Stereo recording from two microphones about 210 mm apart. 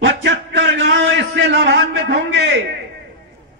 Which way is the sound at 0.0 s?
60° right (ahead or behind).